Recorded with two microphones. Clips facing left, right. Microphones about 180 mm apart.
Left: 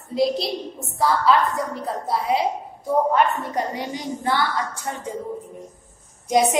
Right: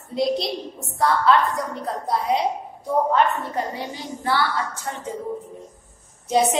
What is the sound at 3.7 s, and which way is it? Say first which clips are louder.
A woman's voice: left 3 dB; 15° left (ahead or behind).